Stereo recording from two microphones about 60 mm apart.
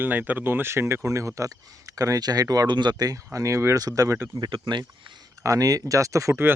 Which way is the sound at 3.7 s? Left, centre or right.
Right.